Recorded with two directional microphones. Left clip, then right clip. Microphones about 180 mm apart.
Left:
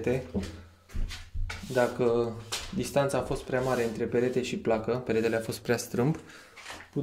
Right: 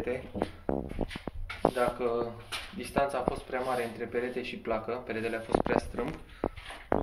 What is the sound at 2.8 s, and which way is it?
Speech, 70° left (ahead or behind).